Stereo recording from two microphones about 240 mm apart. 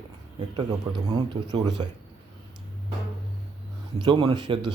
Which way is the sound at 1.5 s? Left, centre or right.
Centre.